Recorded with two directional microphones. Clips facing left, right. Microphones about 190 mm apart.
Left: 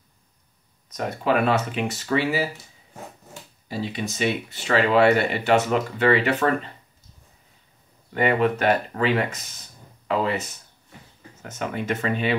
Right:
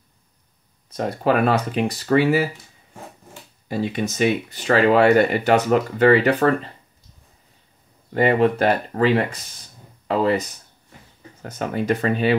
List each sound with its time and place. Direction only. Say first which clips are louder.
0.9 s speech: right 3 dB; 35° right (ahead or behind)
3.6 s speech: right 5 dB; 50° right (ahead or behind)
8.1 s speech: right 4 dB; 35° right (ahead or behind)
11.4 s speech: right 5 dB; 35° right (ahead or behind)